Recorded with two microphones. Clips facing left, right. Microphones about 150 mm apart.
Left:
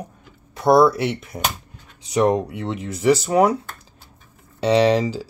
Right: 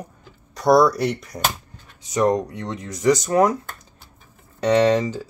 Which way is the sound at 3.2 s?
10° left (ahead or behind).